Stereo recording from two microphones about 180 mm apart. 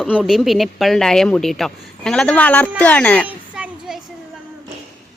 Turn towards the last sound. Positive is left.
turn(degrees=-5)  # may be behind; listen again after turning